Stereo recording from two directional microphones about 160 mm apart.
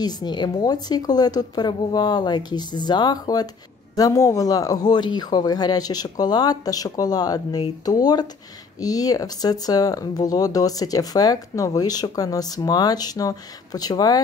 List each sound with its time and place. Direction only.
0.0 s speech: 25° left (ahead or behind)